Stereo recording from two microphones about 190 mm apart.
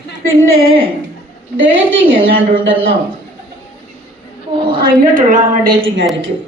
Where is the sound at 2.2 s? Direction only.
85° right.